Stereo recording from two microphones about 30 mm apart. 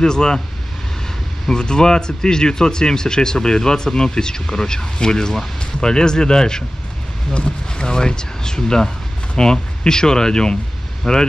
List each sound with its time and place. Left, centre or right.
0.0 s speech: left
1.5 s speech: left
11.1 s speech: centre